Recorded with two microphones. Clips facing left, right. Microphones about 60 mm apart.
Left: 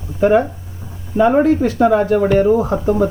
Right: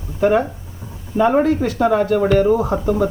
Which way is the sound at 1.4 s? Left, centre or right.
Left.